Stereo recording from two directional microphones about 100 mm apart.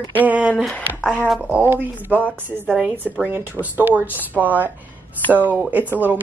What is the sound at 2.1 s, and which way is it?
Speech, 15° left (ahead or behind).